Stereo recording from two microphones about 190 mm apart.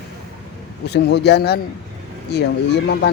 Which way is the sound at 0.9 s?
60° left (ahead or behind).